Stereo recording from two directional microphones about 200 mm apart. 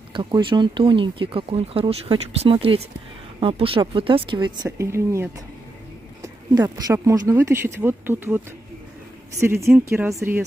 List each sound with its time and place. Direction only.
0.1 s speech: 25° right (ahead or behind)
9.4 s speech: 15° right (ahead or behind)